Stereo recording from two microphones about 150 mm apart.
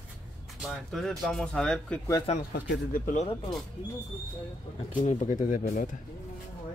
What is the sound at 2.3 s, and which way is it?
Speech, 45° left (ahead or behind).